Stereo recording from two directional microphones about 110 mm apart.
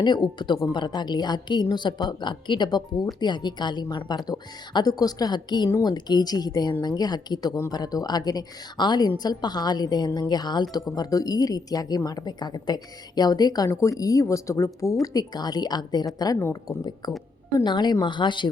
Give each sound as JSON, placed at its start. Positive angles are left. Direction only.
{"t": 0.0, "sound": "speech", "side_deg": 40}